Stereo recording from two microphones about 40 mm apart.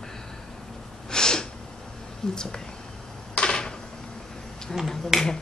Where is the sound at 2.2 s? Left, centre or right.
Centre.